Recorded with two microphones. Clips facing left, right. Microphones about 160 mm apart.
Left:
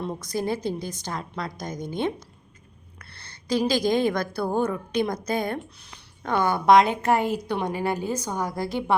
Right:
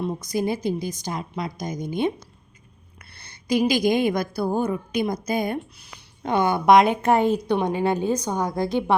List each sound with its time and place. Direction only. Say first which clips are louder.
0.0 s a woman's voice: right 3 dB; 10° right (ahead or behind)
3.2 s a woman's voice: right 3 dB; 15° right (ahead or behind)